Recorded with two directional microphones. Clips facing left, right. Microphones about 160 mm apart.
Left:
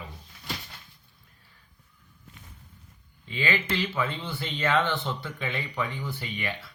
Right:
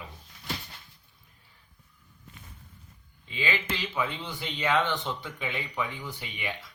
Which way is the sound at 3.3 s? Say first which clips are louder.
Left 3 dB; 15° right (ahead or behind).